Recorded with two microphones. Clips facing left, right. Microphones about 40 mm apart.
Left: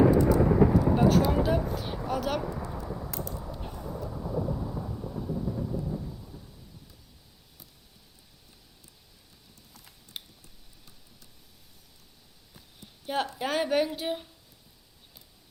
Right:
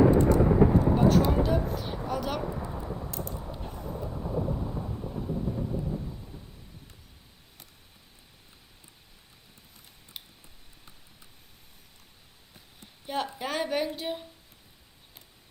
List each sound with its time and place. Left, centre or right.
0.1 s thunder: right
0.3 s thunder: centre
0.9 s speech: centre
2.8 s a sound: centre
3.6 s vehicle: centre
4.1 s thunder: centre
10.2 s a sound: centre
13.1 s a woman's voice: centre